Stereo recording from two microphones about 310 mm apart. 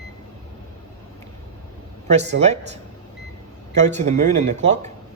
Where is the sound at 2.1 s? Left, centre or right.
Right.